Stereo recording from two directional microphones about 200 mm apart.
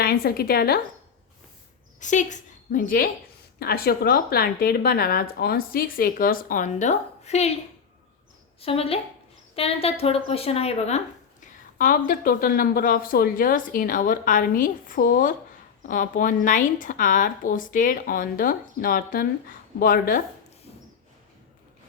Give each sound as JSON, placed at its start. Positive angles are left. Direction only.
{"t": 0.0, "sound": "a woman's voice", "side_deg": 50}
{"t": 2.0, "sound": "a woman's voice", "side_deg": 40}
{"t": 8.6, "sound": "a woman's voice", "side_deg": 30}